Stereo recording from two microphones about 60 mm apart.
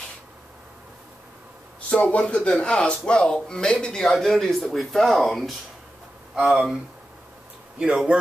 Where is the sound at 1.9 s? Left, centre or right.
Centre.